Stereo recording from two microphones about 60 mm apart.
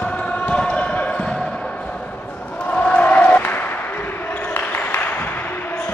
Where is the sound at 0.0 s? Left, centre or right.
Left.